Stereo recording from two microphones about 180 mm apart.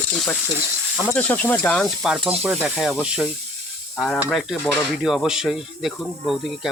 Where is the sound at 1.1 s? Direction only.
10° left (ahead or behind).